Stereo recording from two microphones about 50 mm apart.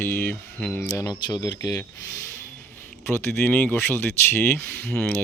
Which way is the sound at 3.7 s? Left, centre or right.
Left.